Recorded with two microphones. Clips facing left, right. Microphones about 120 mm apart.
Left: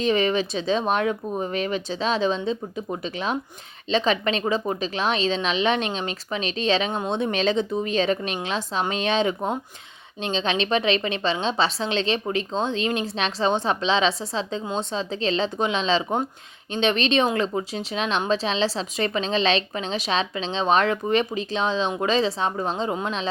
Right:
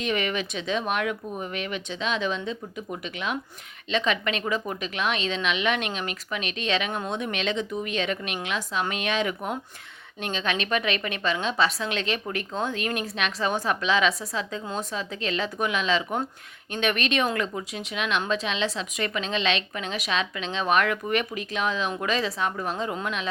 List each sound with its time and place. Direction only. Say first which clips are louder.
0.0 s a woman's voice: left 6 dB; 30° left (ahead or behind)